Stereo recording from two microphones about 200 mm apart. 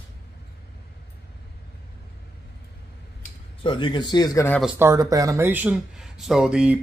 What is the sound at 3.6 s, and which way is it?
Speech, 25° left (ahead or behind).